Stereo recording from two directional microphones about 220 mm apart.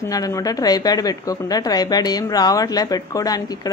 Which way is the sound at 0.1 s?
15° left (ahead or behind).